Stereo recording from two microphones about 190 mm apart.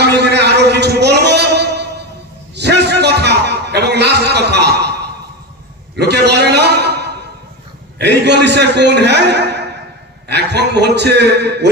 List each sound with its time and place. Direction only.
0.0 s music: 60° right (ahead or behind)
2.5 s a sound: 60° right (ahead or behind)
8.0 s a man's voice: 65° right (ahead or behind)